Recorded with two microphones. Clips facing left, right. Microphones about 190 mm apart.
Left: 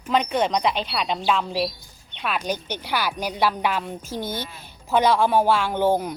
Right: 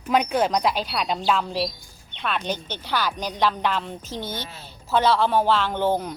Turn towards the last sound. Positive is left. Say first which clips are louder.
# left 2 dB
turn(degrees=10)  # may be behind; listen again after turning